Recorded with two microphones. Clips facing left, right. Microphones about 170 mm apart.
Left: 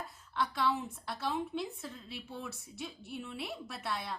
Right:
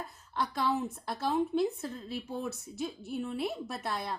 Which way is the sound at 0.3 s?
40° right (ahead or behind).